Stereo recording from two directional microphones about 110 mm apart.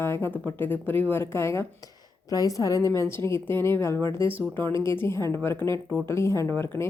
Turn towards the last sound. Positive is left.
turn(degrees=20)  # may be behind; listen again after turning